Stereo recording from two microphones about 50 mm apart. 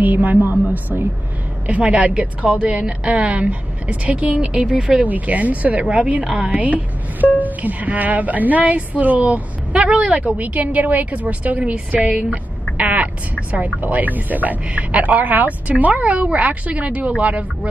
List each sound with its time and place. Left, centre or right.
0.0 s a woman's voice: right
12.7 s a sound: right
13.7 s a woman's voice: right